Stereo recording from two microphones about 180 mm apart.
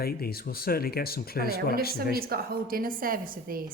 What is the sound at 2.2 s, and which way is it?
A woman's voice, 55° right (ahead or behind).